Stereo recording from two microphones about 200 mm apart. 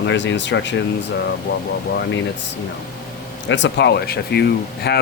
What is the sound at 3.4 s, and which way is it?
A man's voice, 65° left (ahead or behind).